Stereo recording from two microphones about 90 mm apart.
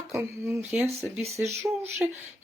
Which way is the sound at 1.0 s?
Centre (ahead or behind).